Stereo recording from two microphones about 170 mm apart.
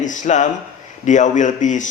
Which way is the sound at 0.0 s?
45° left (ahead or behind).